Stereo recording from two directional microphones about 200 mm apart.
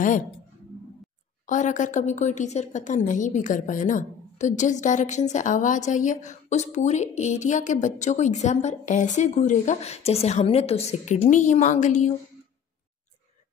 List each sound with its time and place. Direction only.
1.5 s a woman's voice: 40° left (ahead or behind)